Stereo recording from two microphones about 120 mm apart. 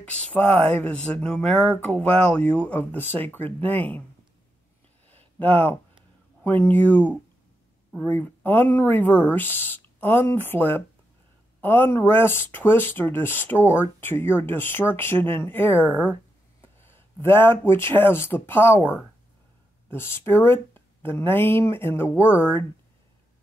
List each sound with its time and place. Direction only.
0.4 s speech: 55° right (ahead or behind)
1.2 s speech: 10° left (ahead or behind)
5.0 s a sound: 15° left (ahead or behind)
6.4 s speech: 15° left (ahead or behind)
19.9 s speech: 20° left (ahead or behind)